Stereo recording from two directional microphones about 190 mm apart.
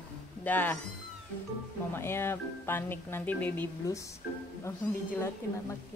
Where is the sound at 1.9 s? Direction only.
15° left (ahead or behind).